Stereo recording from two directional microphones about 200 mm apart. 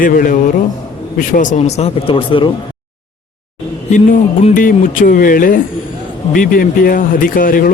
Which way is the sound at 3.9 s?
40° left (ahead or behind).